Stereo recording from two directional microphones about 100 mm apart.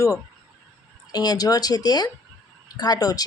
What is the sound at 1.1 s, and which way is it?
Speech, 40° left (ahead or behind).